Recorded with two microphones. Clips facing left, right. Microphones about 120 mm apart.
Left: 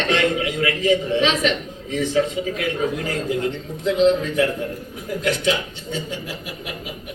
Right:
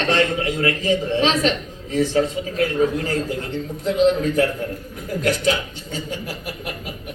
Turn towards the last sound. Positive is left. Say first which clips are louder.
# right 1 dB
turn(degrees=-45)  # may be behind; listen again after turning